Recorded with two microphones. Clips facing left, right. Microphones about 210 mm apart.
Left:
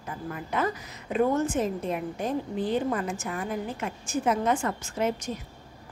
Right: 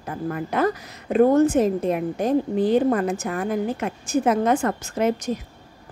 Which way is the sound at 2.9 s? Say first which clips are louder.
Right 8 dB; 60° right (ahead or behind).